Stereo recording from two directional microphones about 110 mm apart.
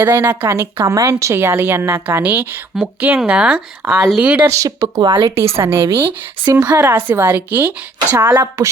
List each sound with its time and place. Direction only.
0.0 s speech: 20° right (ahead or behind)
4.4 s speech: 30° right (ahead or behind)
5.5 s speech: 20° right (ahead or behind)